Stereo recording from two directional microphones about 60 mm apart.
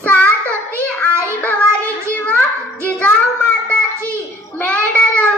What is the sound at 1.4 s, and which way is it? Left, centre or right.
Child singing, left.